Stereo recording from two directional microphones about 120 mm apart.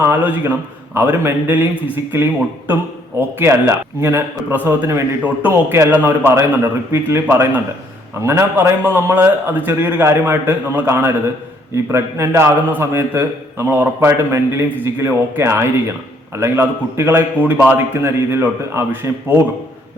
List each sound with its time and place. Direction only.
0.0 s a man's voice: 15° right (ahead or behind)